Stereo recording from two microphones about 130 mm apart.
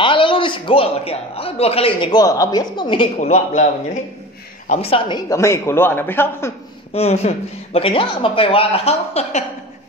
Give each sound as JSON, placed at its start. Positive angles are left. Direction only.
{"t": 0.0, "sound": "a man's voice", "side_deg": 40}
{"t": 2.1, "sound": "a woman's voice", "side_deg": 25}
{"t": 3.2, "sound": "a man's voice", "side_deg": 60}
{"t": 5.3, "sound": "speech", "side_deg": 20}
{"t": 6.9, "sound": "speech", "side_deg": 50}